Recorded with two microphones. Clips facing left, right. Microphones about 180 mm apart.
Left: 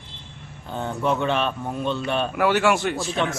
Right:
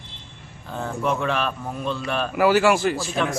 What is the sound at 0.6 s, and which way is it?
Speech, 30° left (ahead or behind).